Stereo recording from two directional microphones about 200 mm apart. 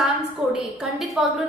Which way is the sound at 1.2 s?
Centre (ahead or behind).